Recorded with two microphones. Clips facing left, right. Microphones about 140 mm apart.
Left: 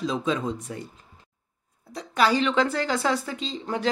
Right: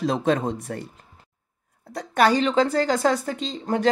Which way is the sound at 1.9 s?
50° right (ahead or behind).